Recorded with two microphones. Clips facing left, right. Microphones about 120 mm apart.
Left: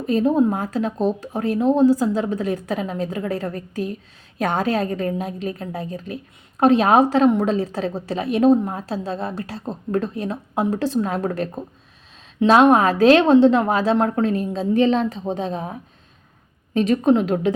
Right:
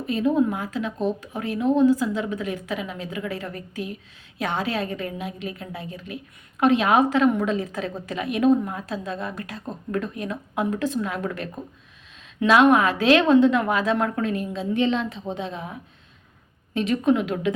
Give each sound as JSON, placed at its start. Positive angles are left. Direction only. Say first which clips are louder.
{"t": 0.0, "sound": "a woman's voice", "louder": "left 4 dB", "side_deg": 40}